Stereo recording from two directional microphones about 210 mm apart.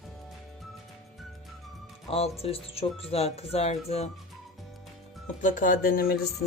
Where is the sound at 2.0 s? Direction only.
30° left (ahead or behind).